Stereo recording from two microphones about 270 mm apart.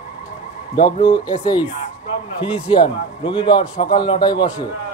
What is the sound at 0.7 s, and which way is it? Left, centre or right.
Speech, centre.